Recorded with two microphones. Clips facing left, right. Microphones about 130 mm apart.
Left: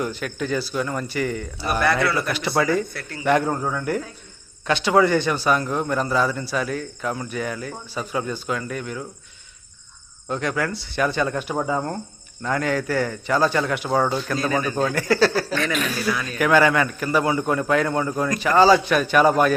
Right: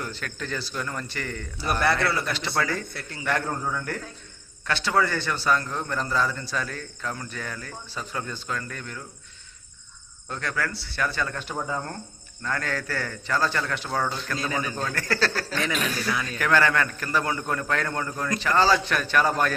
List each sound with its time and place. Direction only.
0.0 s a man's voice: 15° left (ahead or behind)
10.2 s a man's voice: 20° left (ahead or behind)